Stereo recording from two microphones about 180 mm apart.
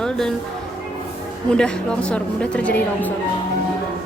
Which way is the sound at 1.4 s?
5° left (ahead or behind).